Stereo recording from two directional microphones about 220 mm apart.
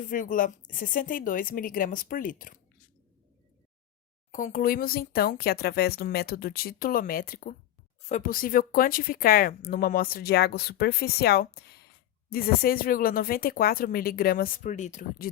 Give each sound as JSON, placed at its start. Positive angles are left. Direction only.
{"t": 0.0, "sound": "speech", "side_deg": 35}
{"t": 4.3, "sound": "speech", "side_deg": 35}